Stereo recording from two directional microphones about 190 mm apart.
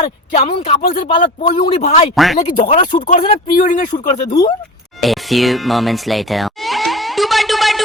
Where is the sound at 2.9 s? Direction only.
35° left (ahead or behind).